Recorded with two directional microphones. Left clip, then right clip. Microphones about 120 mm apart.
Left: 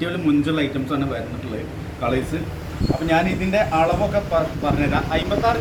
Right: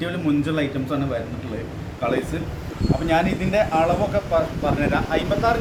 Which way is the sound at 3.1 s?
10° left (ahead or behind).